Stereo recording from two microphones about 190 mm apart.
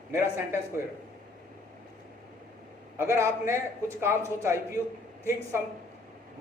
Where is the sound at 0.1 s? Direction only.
15° right (ahead or behind).